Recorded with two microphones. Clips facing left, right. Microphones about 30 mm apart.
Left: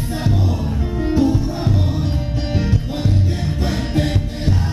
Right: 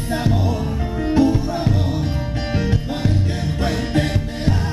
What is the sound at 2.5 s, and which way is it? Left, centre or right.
Music, centre.